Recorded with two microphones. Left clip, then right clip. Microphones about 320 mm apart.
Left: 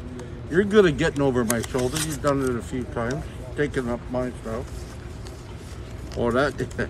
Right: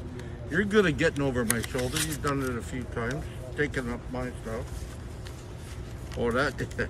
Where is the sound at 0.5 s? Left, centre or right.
Centre.